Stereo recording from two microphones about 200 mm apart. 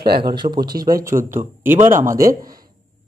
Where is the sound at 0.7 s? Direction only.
45° right (ahead or behind).